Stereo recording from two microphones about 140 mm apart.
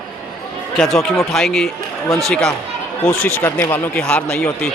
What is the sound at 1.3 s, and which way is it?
Speech, centre (ahead or behind).